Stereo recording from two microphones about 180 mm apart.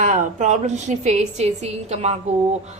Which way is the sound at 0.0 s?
45° right (ahead or behind).